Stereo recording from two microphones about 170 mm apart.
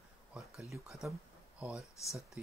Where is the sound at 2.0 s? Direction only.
20° left (ahead or behind).